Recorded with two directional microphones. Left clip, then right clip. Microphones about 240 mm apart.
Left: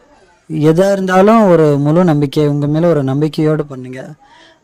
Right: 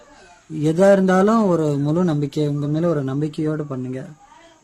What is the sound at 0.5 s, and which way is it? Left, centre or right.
Speech, left.